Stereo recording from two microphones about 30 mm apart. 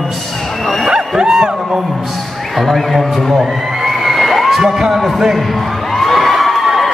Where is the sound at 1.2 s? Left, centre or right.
Right.